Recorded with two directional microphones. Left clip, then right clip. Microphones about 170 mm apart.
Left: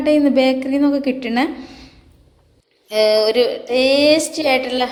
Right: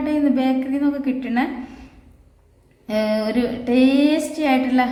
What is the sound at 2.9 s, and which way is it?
A woman's voice, 35° left (ahead or behind).